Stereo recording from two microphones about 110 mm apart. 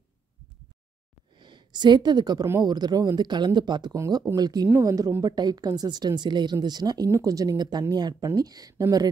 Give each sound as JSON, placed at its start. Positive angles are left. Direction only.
{"t": 1.4, "sound": "a woman's voice", "side_deg": -45}
{"t": 3.9, "sound": "speech", "side_deg": -30}